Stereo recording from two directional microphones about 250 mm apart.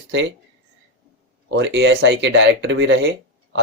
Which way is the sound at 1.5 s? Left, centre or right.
Right.